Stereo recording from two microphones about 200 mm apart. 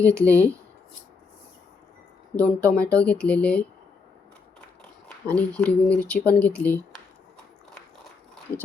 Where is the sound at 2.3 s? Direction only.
5° left (ahead or behind).